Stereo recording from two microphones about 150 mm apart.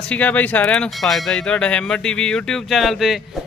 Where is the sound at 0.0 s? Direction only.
10° left (ahead or behind).